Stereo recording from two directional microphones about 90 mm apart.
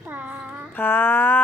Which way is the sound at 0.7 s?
20° left (ahead or behind).